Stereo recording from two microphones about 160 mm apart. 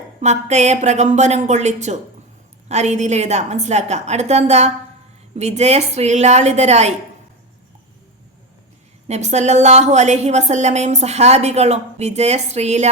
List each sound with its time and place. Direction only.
0.2 s a woman's voice: 45° right (ahead or behind)
9.0 s a woman's voice: 45° right (ahead or behind)